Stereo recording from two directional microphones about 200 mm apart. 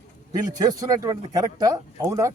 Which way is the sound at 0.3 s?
20° right (ahead or behind).